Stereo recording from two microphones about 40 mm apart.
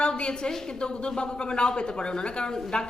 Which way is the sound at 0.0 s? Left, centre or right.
Left.